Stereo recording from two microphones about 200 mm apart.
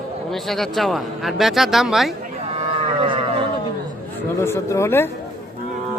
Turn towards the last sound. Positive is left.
turn(degrees=15)  # may be behind; listen again after turning